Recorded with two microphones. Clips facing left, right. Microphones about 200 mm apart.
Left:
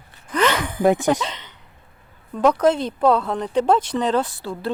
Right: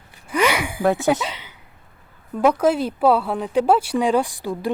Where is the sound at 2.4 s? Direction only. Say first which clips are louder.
Even; 10° right (ahead or behind).